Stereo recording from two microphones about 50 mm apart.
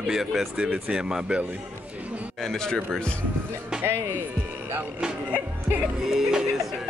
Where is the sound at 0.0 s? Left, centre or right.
Centre.